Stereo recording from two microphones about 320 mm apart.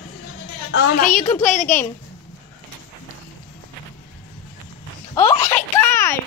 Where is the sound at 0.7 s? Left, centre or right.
Left.